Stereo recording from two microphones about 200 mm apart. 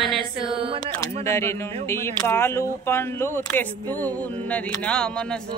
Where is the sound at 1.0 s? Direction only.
15° left (ahead or behind).